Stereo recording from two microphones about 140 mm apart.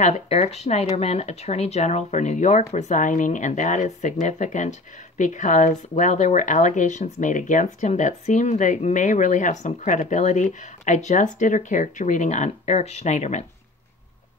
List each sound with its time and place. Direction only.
0.0 s speech: 50° left (ahead or behind)